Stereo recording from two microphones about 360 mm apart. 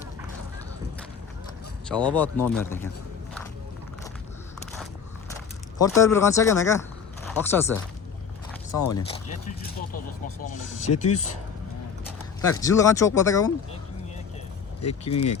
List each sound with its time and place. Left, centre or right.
1.9 s speech: centre
5.7 s speech: centre
8.8 s speech: left
10.4 s speech: centre
12.5 s speech: centre
14.8 s speech: centre